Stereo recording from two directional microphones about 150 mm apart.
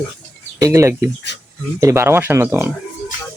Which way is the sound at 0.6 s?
20° right (ahead or behind).